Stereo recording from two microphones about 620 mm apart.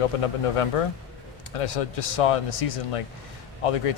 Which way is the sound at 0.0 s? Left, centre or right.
Left.